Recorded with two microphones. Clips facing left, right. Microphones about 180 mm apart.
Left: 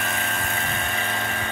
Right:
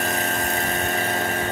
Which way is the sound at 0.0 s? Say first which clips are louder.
Right 4 dB; 40° right (ahead or behind).